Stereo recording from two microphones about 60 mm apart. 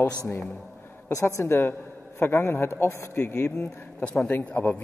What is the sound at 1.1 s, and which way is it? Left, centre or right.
A woman's voice, left.